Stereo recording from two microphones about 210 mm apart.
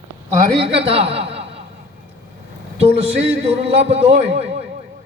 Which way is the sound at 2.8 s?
30° right (ahead or behind).